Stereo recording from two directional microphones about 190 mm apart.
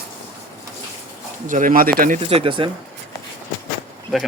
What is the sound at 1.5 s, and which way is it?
Speech, 45° right (ahead or behind).